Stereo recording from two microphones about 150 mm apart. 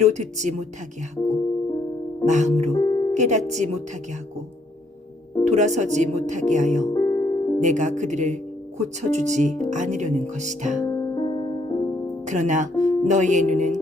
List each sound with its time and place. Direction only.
0.0 s speech: 50° right (ahead or behind)
2.2 s speech: 50° right (ahead or behind)
2.7 s music: 30° left (ahead or behind)
3.2 s speech: 50° right (ahead or behind)
5.5 s speech: 50° right (ahead or behind)
6.9 s music: 25° left (ahead or behind)
7.6 s speech: 55° right (ahead or behind)
10.8 s music: 25° left (ahead or behind)
12.2 s speech: 55° right (ahead or behind)